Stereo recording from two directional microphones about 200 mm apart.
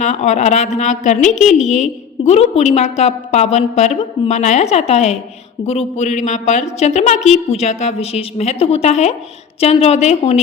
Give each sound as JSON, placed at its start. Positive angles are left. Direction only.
{"t": 0.0, "sound": "a woman's voice", "side_deg": 35}